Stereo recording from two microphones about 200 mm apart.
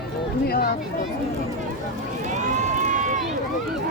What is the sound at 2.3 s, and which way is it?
Run, 35° right (ahead or behind).